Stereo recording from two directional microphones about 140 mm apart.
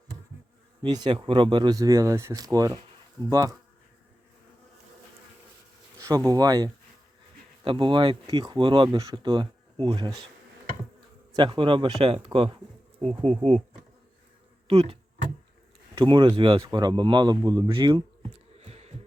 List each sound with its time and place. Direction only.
0.8 s speech: 30° right (ahead or behind)
6.0 s speech: 25° right (ahead or behind)
11.3 s speech: 35° right (ahead or behind)
13.0 s bee: 40° right (ahead or behind)
14.7 s speech: 45° right (ahead or behind)
16.0 s speech: 35° right (ahead or behind)
16.6 s speech: 30° right (ahead or behind)
18.3 s a sound: 50° right (ahead or behind)